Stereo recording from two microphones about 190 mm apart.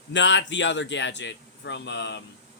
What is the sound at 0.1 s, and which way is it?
A man's voice, 70° left (ahead or behind).